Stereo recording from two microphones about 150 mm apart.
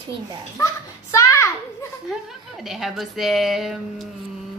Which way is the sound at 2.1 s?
5° right (ahead or behind).